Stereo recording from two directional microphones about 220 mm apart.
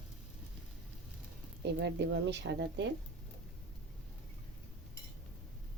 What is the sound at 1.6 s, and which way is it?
A woman's voice, 50° right (ahead or behind).